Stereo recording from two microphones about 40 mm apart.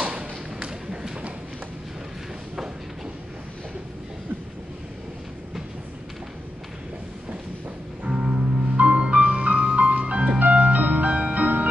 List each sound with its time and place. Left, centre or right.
0.0 s thump: right
8.0 s music: right